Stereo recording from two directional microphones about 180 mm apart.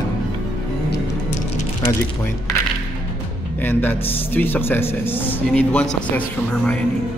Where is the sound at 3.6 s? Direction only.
10° left (ahead or behind).